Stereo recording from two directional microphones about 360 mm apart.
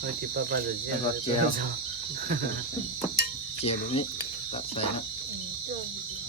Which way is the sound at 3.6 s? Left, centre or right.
Centre.